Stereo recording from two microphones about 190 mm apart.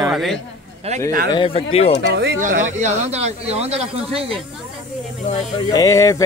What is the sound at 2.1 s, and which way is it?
Speech, 65° right (ahead or behind).